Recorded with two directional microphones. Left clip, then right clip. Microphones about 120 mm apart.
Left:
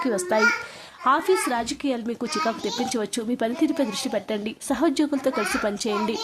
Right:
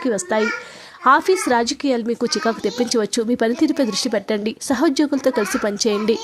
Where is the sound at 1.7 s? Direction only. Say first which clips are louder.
Right 7 dB; 40° right (ahead or behind).